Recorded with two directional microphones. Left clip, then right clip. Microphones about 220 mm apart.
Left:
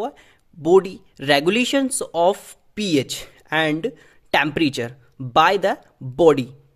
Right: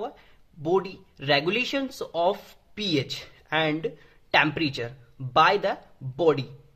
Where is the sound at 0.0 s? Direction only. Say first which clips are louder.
Left 7 dB; 45° left (ahead or behind).